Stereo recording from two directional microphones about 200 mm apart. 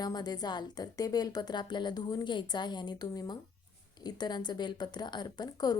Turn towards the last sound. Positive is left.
turn(degrees=20)  # may be behind; listen again after turning